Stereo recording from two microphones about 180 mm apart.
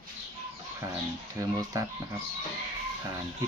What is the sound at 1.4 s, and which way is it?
Speech, 20° right (ahead or behind).